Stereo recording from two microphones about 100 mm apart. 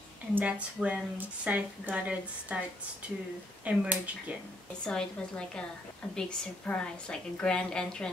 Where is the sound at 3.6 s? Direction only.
15° right (ahead or behind).